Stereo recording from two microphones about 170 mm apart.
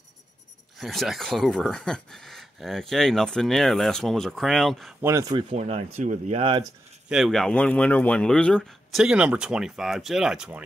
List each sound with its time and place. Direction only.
0.7 s speech: centre (ahead or behind)
5.0 s speech: 20° right (ahead or behind)
5.6 s speech: 40° right (ahead or behind)
7.1 s speech: centre (ahead or behind)